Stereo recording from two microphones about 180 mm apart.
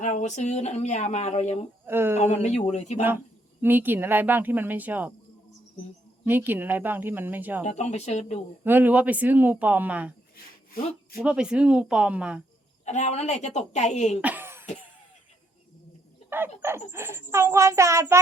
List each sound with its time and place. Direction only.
0.0 s speech: 40° left (ahead or behind)
1.9 s speech: 10° right (ahead or behind)
2.2 s speech: 40° left (ahead or behind)
3.0 s speech: 10° right (ahead or behind)
6.2 s speech: 10° right (ahead or behind)
7.6 s speech: 40° left (ahead or behind)
8.6 s speech: 10° right (ahead or behind)
11.2 s speech: 5° right (ahead or behind)
12.8 s speech: 40° left (ahead or behind)
14.2 s cough: 10° right (ahead or behind)
16.6 s speech: 15° right (ahead or behind)